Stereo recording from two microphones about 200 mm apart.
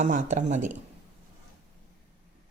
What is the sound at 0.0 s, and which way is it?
Speech, 40° right (ahead or behind).